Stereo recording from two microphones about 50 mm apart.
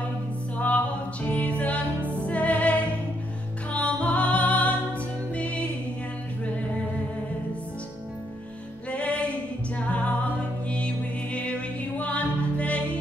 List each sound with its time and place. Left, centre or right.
0.6 s music: left
8.9 s music: left
12.0 s music: left